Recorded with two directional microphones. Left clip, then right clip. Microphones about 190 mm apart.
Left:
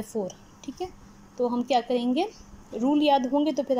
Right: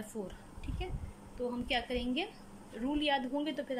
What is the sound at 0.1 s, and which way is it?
A woman's voice, 15° left (ahead or behind).